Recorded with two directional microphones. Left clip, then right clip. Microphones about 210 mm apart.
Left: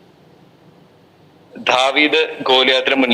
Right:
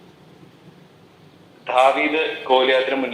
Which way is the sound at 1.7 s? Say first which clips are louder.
Left 3 dB; 55° left (ahead or behind).